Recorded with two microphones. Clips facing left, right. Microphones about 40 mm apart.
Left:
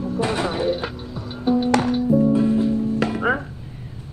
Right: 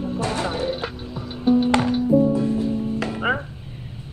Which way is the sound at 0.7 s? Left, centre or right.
Centre.